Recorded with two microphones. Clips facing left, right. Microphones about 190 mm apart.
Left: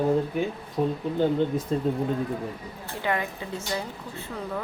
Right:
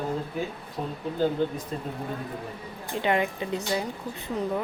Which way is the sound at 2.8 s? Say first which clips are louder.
Right 3 dB; 20° right (ahead or behind).